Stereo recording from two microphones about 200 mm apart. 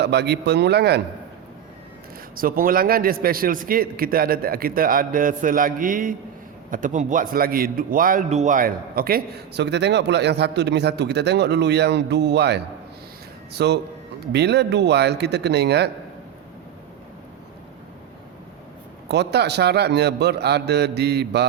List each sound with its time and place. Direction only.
0.0 s a man's voice: 55° right (ahead or behind)
2.3 s a man's voice: 45° right (ahead or behind)
19.0 s a man's voice: 55° right (ahead or behind)